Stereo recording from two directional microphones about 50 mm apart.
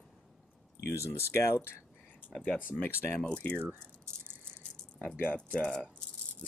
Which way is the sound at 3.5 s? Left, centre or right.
Right.